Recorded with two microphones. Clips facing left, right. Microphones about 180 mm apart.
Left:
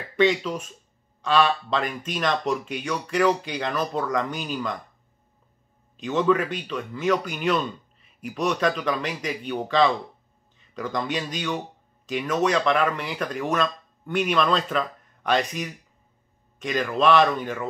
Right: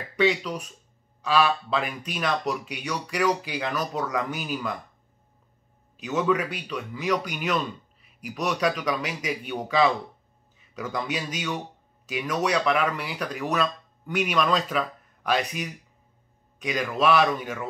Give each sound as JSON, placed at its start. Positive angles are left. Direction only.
{"t": 0.2, "sound": "speech", "side_deg": 0}
{"t": 5.9, "sound": "a man's voice", "side_deg": -5}